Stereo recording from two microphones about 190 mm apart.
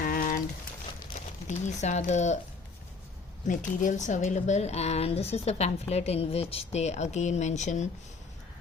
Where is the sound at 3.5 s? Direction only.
40° left (ahead or behind).